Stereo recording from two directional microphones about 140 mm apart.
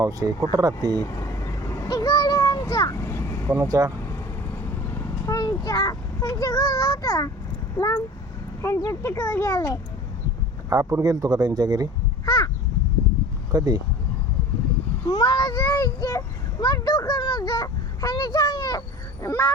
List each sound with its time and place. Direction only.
0.0 s speech: 25° right (ahead or behind)
1.0 s vehicle: 20° left (ahead or behind)
3.5 s speech: 25° right (ahead or behind)
4.0 s vehicle: 15° left (ahead or behind)
5.3 s a child's voice: 25° left (ahead or behind)
10.7 s speech: 20° right (ahead or behind)
12.2 s crow: 25° left (ahead or behind)
13.5 s speech: 30° right (ahead or behind)
15.0 s a child's voice: 30° left (ahead or behind)